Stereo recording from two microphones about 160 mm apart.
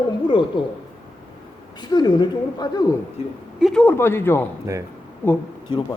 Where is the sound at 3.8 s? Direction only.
15° left (ahead or behind).